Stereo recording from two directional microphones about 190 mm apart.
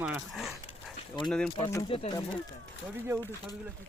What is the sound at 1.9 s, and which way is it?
Speech, 30° left (ahead or behind).